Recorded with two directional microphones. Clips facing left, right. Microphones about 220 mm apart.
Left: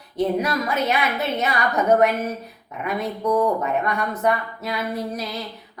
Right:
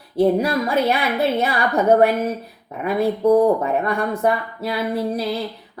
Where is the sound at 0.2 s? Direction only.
30° right (ahead or behind).